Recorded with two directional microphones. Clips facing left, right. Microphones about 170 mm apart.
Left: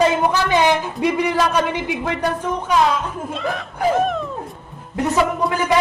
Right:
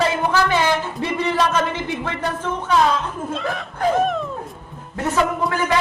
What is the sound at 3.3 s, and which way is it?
Speech, centre (ahead or behind).